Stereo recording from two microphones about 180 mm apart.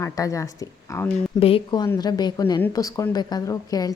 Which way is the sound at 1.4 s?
30° left (ahead or behind).